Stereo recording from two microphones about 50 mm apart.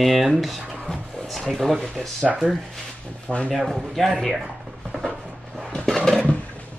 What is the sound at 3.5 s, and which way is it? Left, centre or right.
Speech, centre.